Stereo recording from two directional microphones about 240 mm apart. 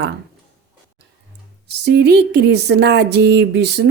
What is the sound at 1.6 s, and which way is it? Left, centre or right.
Speech, right.